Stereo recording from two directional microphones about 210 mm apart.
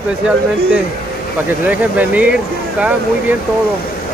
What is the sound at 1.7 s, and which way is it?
Speech, 5° right (ahead or behind).